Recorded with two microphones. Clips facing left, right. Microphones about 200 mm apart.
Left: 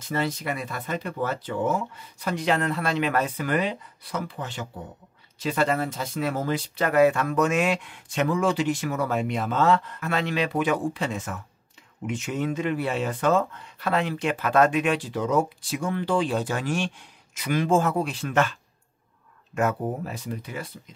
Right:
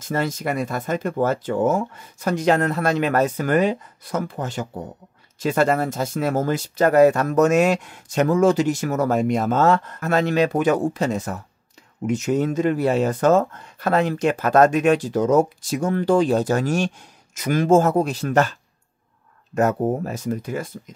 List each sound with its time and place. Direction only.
0.0 s speech: 45° right (ahead or behind)